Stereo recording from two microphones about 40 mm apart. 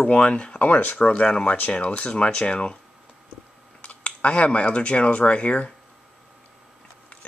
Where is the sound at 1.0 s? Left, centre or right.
Left.